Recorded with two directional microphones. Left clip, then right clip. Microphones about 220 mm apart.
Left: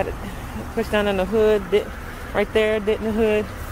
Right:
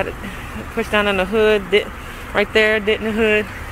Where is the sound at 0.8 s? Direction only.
10° left (ahead or behind).